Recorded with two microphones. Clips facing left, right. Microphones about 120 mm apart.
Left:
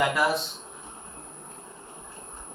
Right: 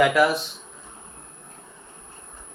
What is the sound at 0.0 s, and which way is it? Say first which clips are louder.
Speech: right 6 dB; 90° right.